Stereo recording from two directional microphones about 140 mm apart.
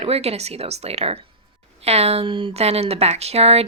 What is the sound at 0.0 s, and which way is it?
Speech, 45° right (ahead or behind).